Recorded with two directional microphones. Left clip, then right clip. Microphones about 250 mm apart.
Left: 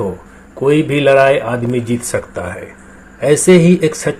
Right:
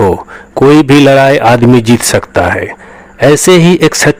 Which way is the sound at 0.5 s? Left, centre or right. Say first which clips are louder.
Right 9 dB; right.